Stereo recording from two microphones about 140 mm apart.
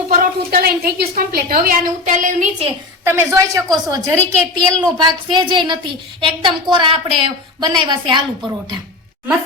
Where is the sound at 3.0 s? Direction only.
20° right (ahead or behind).